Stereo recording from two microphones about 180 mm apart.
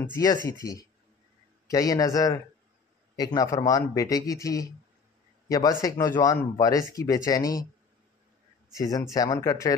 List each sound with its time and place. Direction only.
0.2 s speech: 20° left (ahead or behind)
8.7 s speech: 20° left (ahead or behind)